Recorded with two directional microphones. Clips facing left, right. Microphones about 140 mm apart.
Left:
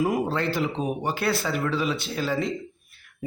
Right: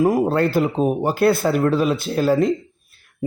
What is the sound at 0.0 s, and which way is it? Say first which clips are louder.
A man's voice: right 7 dB; 50° right (ahead or behind).